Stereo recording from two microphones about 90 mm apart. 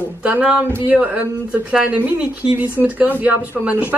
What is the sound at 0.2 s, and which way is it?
Speech, 10° right (ahead or behind).